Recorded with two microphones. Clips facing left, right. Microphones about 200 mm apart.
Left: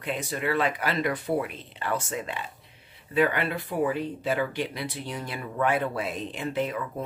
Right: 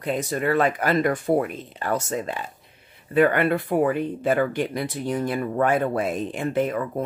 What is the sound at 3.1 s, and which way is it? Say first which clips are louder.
Speech: right 6 dB; 55° right (ahead or behind).